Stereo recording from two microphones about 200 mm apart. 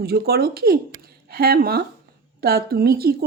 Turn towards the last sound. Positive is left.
turn(degrees=-50)  # may be behind; listen again after turning